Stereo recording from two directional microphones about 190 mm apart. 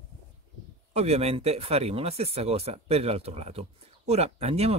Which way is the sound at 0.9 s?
35° right (ahead or behind).